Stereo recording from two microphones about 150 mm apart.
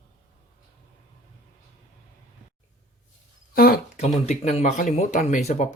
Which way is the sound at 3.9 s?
50° left (ahead or behind).